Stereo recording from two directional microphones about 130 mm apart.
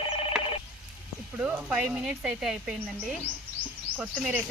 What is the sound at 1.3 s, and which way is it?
Speech, 10° right (ahead or behind).